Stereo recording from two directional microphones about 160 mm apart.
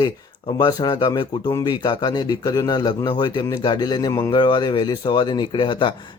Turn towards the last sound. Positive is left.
turn(degrees=30)  # may be behind; listen again after turning